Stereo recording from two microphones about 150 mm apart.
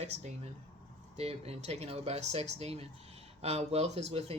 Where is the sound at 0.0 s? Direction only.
45° right (ahead or behind).